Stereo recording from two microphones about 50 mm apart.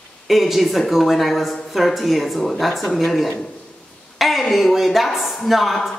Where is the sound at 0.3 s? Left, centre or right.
Centre.